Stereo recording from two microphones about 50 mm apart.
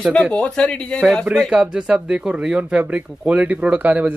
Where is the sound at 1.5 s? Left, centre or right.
Centre.